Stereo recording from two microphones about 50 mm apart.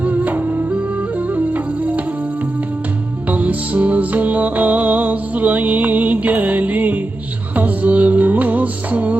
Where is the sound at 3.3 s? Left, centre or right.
Right.